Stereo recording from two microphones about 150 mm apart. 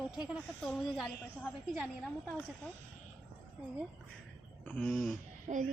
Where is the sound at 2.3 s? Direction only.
10° left (ahead or behind).